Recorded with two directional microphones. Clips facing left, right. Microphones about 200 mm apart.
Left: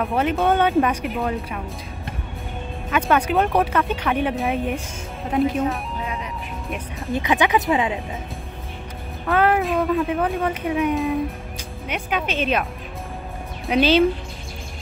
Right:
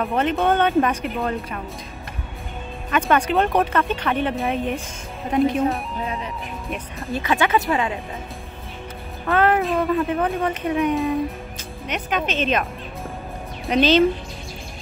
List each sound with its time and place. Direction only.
0.0 s speech: 10° left (ahead or behind)
2.9 s speech: 5° left (ahead or behind)
7.1 s speech: 15° left (ahead or behind)
9.2 s speech: 5° left (ahead or behind)
13.7 s speech: 10° left (ahead or behind)